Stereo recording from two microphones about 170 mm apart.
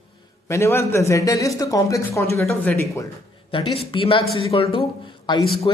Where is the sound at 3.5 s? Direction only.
30° left (ahead or behind).